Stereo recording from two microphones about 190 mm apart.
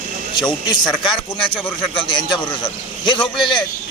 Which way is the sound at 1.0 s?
25° left (ahead or behind).